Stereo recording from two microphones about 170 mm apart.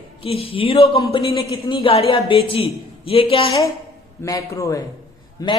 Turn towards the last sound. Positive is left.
turn(degrees=20)  # may be behind; listen again after turning